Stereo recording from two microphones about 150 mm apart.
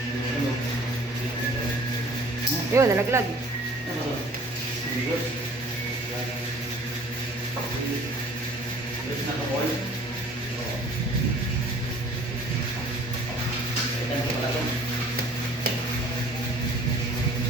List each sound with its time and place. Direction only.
2.7 s speech: 20° right (ahead or behind)